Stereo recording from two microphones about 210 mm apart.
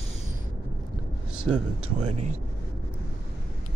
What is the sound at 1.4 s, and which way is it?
Speech, 90° right.